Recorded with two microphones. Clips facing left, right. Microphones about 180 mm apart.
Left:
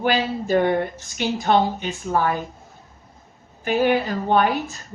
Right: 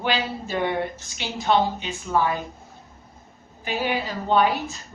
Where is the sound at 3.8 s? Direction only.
50° left (ahead or behind).